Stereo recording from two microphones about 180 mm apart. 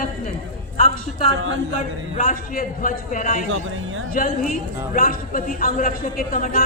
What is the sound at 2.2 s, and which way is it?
A man's voice, 50° left (ahead or behind).